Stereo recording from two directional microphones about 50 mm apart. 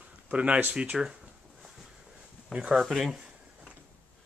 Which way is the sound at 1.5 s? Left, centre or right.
Centre.